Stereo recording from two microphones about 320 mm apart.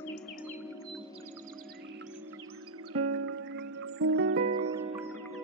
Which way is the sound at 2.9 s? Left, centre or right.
Right.